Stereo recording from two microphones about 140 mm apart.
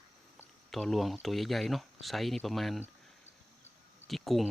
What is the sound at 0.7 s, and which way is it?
Speech, centre (ahead or behind).